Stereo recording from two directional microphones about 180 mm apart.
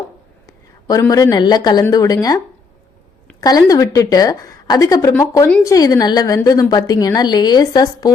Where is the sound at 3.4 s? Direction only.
20° left (ahead or behind).